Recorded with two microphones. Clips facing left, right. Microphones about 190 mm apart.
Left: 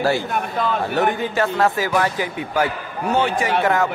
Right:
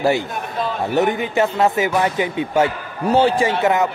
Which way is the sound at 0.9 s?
20° right (ahead or behind).